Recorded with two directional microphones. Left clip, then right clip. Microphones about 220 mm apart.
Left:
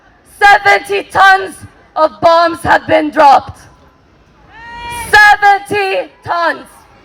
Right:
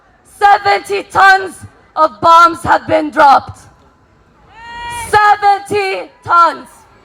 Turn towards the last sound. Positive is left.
turn(degrees=15)  # may be behind; listen again after turning